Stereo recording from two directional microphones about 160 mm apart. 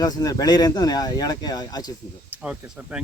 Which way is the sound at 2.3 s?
10° right (ahead or behind).